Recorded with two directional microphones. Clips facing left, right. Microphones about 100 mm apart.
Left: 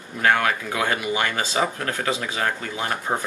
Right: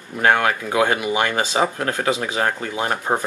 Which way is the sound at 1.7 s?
35° right (ahead or behind).